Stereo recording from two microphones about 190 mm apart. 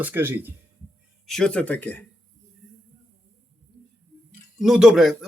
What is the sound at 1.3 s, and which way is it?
Speech, 5° left (ahead or behind).